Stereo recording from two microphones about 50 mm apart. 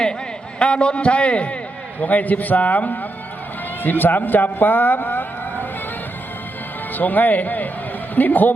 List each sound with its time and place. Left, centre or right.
0.6 s a man's voice: left
6.9 s speech: left